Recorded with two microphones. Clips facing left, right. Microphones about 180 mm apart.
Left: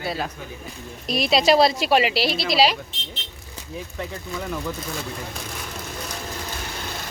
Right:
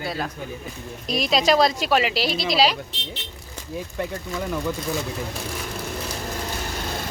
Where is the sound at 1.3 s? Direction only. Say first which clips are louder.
Left 2 dB; 5° left (ahead or behind).